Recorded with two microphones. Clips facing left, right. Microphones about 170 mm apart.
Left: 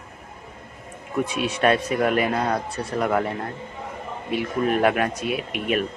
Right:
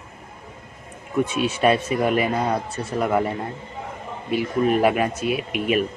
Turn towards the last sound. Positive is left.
turn(degrees=-5)  # may be behind; listen again after turning